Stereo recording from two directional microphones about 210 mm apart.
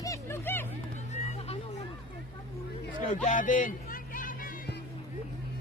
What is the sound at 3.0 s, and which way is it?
Music, 35° left (ahead or behind).